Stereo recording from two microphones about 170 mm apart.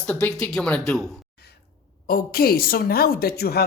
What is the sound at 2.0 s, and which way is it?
A woman's voice, 60° left (ahead or behind).